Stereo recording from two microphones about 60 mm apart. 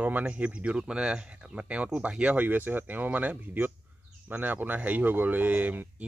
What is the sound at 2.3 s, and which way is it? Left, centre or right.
Speech, right.